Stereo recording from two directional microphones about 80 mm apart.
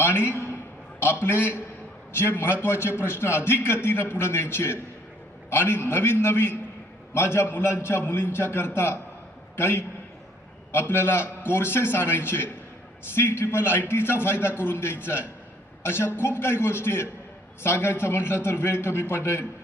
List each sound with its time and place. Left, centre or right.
0.3 s a man's voice: left